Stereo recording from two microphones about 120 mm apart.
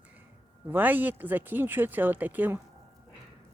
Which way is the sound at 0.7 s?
15° right (ahead or behind).